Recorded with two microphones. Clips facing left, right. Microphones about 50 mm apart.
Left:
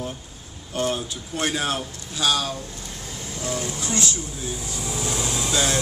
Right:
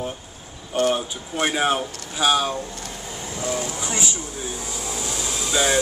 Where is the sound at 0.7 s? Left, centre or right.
Right.